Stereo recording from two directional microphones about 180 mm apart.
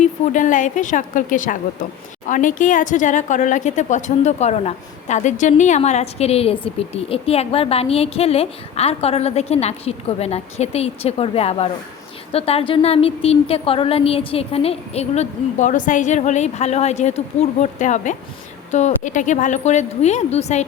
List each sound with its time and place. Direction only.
0.0 s a woman's voice: 45° left (ahead or behind)